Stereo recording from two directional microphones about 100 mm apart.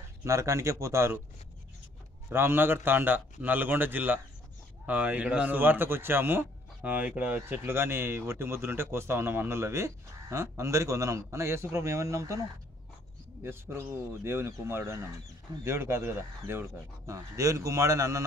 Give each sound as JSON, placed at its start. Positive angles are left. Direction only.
{"t": 0.2, "sound": "a man's voice", "side_deg": -30}
{"t": 2.2, "sound": "a man's voice", "side_deg": -20}
{"t": 13.4, "sound": "a man's voice", "side_deg": -25}